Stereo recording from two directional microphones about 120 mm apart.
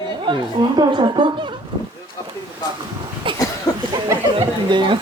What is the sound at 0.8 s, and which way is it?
Speech, 40° right (ahead or behind).